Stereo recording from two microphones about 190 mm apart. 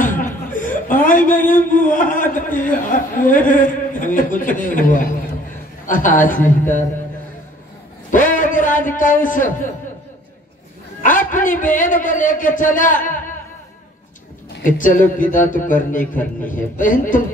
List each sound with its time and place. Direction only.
0.0 s chuckle: 45° left (ahead or behind)
2.6 s a man's voice: 45° left (ahead or behind)
8.1 s a sound: 45° left (ahead or behind)
11.0 s a man's voice: 45° left (ahead or behind)
14.6 s a man's voice: 45° left (ahead or behind)